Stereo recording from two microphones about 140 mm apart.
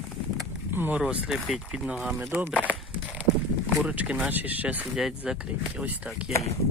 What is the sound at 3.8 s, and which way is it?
Speech, 10° right (ahead or behind).